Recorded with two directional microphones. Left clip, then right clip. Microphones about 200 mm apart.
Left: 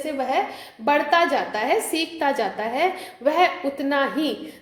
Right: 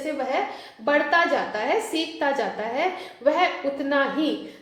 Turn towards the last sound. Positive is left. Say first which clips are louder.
# left 1 dB
turn(degrees=30)  # may be behind; listen again after turning